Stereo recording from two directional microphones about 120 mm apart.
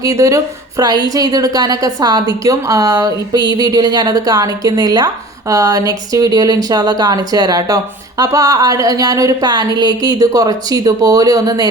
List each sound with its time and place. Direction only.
0.0 s a woman's voice: 30° right (ahead or behind)